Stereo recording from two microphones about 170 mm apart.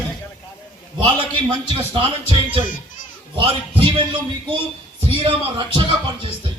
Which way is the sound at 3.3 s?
30° right (ahead or behind).